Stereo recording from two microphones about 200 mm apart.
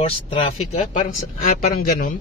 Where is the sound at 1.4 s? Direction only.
45° left (ahead or behind).